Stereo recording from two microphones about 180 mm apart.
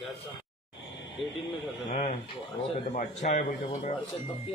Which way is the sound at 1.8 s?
40° left (ahead or behind).